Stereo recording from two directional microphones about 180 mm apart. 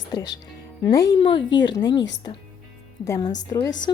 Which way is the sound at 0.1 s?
20° left (ahead or behind).